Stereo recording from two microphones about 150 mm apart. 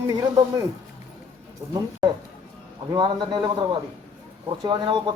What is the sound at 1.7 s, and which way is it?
A man's voice, 30° right (ahead or behind).